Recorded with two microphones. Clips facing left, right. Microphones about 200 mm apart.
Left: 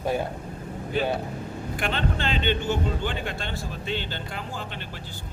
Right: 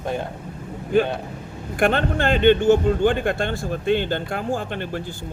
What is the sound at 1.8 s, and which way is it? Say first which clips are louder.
A man's voice: right 9 dB; 50° right (ahead or behind).